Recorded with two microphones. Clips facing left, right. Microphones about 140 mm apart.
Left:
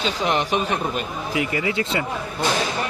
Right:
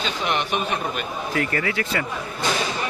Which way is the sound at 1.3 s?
10° left (ahead or behind).